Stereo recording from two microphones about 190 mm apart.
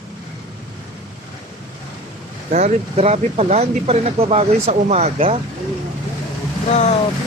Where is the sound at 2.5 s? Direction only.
40° right (ahead or behind).